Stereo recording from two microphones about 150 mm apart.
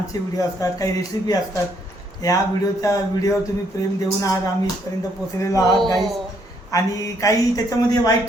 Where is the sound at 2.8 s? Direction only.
20° left (ahead or behind).